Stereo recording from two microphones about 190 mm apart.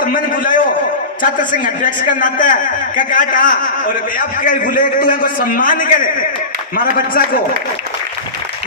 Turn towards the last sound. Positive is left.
turn(degrees=50)  # may be behind; listen again after turning